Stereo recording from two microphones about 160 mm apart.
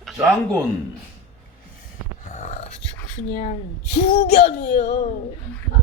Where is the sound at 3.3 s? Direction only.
65° left (ahead or behind).